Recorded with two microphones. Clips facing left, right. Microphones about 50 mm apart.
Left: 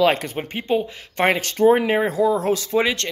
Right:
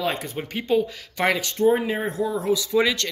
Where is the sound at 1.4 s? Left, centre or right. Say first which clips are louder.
Left 6 dB; left.